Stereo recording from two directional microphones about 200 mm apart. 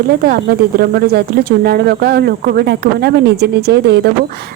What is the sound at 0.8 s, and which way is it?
Speech, 50° right (ahead or behind).